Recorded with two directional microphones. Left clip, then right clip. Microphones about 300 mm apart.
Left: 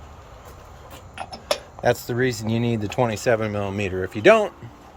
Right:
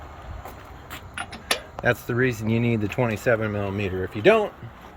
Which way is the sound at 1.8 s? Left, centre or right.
Centre.